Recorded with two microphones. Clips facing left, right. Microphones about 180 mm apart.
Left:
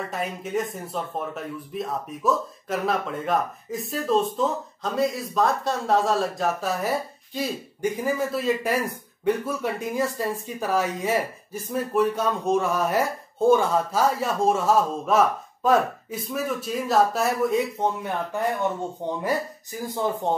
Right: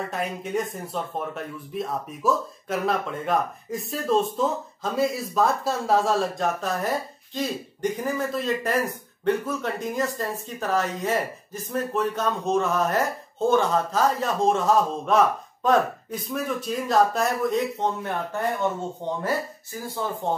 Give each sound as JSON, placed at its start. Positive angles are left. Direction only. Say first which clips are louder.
{"t": 0.1, "sound": "speech", "louder": "even", "side_deg": 0}
{"t": 19.9, "sound": "speech", "louder": "left 2 dB", "side_deg": 15}